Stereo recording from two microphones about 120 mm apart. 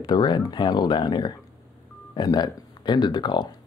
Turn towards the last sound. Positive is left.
turn(degrees=40)  # may be behind; listen again after turning